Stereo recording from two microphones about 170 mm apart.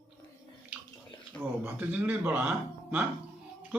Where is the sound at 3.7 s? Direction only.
10° right (ahead or behind).